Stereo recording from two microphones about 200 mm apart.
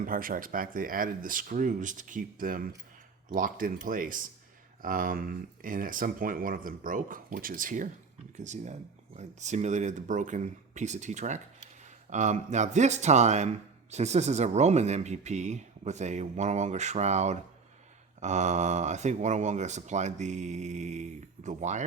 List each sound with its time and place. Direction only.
0.0 s speech: 45° right (ahead or behind)
9.1 s speech: 35° right (ahead or behind)